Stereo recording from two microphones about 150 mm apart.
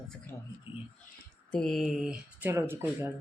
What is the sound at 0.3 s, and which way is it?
Speech, 20° left (ahead or behind).